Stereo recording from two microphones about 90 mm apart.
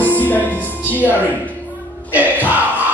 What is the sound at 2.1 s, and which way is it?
Music, 20° right (ahead or behind).